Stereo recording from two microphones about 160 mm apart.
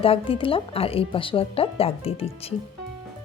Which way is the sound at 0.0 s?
35° left (ahead or behind).